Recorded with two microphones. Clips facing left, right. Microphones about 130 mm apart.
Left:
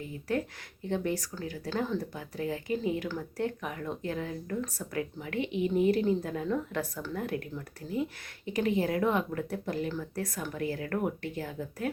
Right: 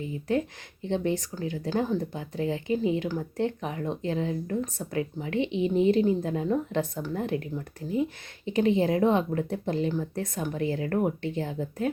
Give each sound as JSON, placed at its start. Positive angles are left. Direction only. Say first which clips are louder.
{"t": 0.0, "sound": "speech", "louder": "right 5 dB", "side_deg": -20}
{"t": 8.4, "sound": "speech", "louder": "right 5 dB", "side_deg": -25}